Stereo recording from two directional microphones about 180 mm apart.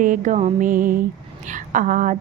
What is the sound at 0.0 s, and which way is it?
Female singing, 45° right (ahead or behind).